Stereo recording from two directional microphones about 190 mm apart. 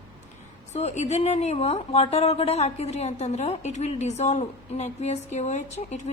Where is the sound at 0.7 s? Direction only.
35° left (ahead or behind).